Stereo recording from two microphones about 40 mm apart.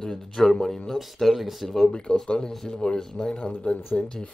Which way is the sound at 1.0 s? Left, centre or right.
Centre.